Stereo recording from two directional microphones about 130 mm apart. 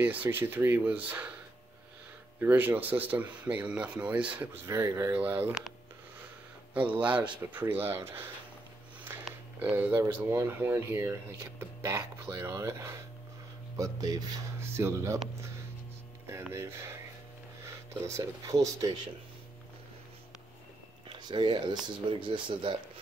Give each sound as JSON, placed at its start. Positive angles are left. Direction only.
{"t": 0.0, "sound": "speech", "side_deg": -10}
{"t": 2.4, "sound": "speech", "side_deg": -15}
{"t": 4.6, "sound": "speech", "side_deg": -25}
{"t": 6.7, "sound": "speech", "side_deg": -10}
{"t": 9.6, "sound": "speech", "side_deg": -15}
{"t": 16.3, "sound": "speech", "side_deg": -20}
{"t": 18.1, "sound": "speech", "side_deg": -25}
{"t": 21.1, "sound": "speech", "side_deg": -35}